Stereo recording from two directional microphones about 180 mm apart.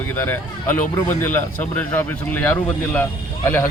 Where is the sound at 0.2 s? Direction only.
10° left (ahead or behind).